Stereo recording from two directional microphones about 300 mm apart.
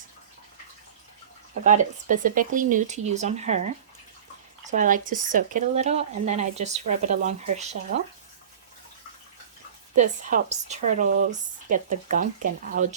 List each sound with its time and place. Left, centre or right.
1.6 s speech: right
4.7 s speech: right
9.9 s speech: right